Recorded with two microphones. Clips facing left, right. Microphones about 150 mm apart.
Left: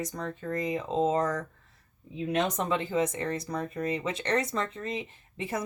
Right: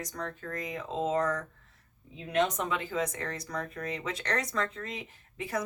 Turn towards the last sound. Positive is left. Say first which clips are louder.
# left 1 dB
turn(degrees=25)  # may be behind; listen again after turning